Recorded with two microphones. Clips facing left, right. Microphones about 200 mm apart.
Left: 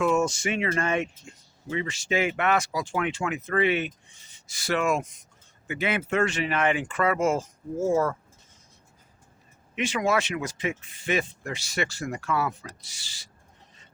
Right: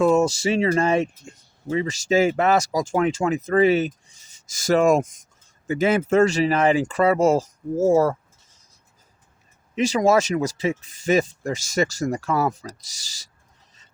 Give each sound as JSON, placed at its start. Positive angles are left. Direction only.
{"t": 0.0, "sound": "speech", "side_deg": -40}
{"t": 9.7, "sound": "speech", "side_deg": -40}